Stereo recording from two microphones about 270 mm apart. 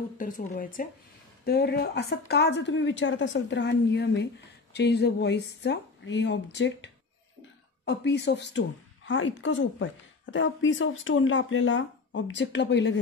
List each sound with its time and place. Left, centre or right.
0.2 s a woman's voice: left